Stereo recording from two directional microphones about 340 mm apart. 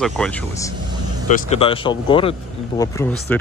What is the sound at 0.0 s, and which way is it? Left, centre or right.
Speech, centre.